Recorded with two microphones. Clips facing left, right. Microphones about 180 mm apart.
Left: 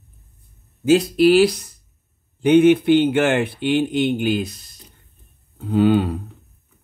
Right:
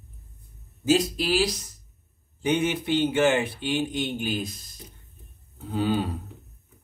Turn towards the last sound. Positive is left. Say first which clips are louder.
# left 9 dB
turn(degrees=65)  # may be behind; listen again after turning